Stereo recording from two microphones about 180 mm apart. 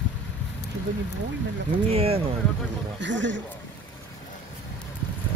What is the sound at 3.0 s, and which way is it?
Speech, 90° right.